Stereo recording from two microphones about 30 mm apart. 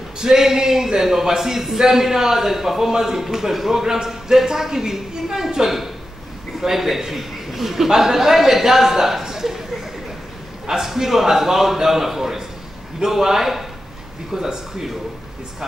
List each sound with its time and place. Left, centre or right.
0.2 s a man's voice: centre
10.7 s a man's voice: centre